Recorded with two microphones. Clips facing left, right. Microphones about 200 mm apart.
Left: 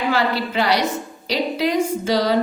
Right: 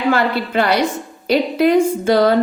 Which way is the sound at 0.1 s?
55° right (ahead or behind).